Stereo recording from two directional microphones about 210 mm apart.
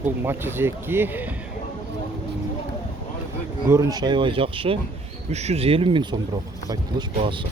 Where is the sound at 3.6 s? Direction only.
15° right (ahead or behind).